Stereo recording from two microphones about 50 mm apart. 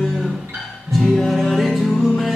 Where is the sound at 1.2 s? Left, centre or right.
Centre.